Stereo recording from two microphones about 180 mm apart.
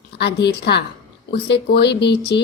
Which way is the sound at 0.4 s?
70° left (ahead or behind).